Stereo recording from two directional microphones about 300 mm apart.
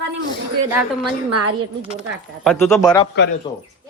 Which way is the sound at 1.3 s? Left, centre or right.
Right.